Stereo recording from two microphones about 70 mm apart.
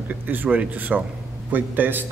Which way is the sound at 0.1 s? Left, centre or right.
Right.